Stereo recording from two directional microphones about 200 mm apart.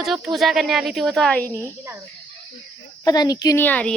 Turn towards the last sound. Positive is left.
turn(degrees=5)  # may be behind; listen again after turning